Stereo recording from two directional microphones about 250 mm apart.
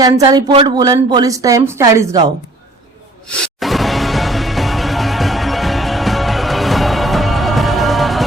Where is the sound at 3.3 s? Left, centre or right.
Centre.